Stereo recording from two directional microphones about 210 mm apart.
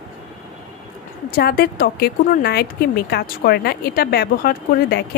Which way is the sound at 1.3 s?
45° left (ahead or behind).